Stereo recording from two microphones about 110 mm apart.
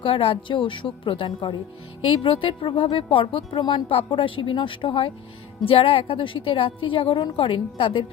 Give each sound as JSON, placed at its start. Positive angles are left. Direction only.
{"t": 0.0, "sound": "a woman's voice", "side_deg": 60}